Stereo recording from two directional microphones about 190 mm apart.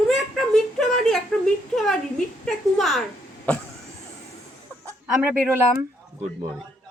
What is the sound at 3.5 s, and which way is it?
Vehicle, 10° left (ahead or behind).